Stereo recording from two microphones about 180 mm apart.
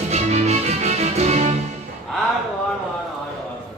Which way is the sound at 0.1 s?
35° right (ahead or behind).